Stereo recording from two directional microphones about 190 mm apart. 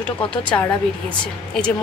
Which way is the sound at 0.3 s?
5° left (ahead or behind).